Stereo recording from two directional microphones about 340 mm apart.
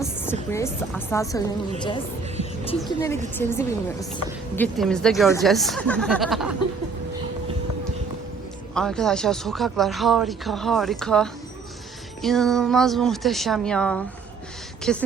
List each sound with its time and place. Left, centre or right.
0.0 s a woman's voice: centre
2.4 s music: centre
2.8 s a woman's voice: centre
8.7 s speech: centre